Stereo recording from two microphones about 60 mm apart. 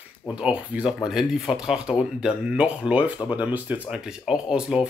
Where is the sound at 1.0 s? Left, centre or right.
Centre; by 3.8 s right.